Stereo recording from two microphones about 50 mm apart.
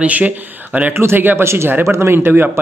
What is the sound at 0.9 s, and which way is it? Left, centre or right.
Speech, right.